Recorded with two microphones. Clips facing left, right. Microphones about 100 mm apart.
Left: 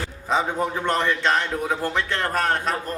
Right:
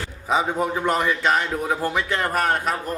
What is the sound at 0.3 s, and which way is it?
A man's voice, 5° right (ahead or behind).